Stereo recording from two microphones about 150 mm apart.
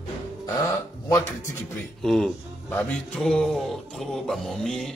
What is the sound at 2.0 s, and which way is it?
A man's voice, centre (ahead or behind).